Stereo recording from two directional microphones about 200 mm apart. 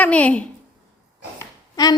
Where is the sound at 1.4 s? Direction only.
20° left (ahead or behind).